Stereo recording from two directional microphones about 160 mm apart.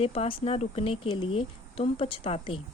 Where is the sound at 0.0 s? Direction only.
35° left (ahead or behind).